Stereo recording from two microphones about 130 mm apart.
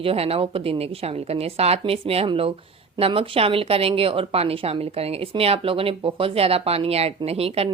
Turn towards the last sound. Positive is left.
turn(degrees=-50)  # may be behind; listen again after turning